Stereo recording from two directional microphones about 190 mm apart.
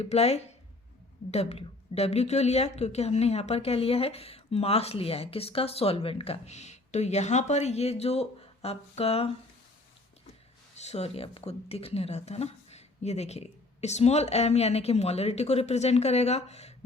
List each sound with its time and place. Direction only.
0.0 s a woman's voice: 35° left (ahead or behind)
10.8 s a woman's voice: 35° left (ahead or behind)